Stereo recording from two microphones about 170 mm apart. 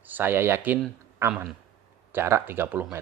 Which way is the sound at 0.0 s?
10° right (ahead or behind).